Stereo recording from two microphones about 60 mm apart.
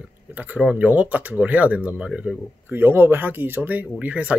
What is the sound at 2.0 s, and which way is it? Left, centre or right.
Speech, centre.